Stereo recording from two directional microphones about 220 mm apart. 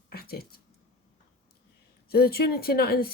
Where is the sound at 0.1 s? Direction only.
45° left (ahead or behind).